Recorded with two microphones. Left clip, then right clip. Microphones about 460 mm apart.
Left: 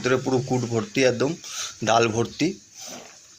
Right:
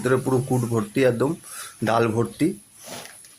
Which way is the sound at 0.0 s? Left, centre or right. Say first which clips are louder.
Right 1 dB; right.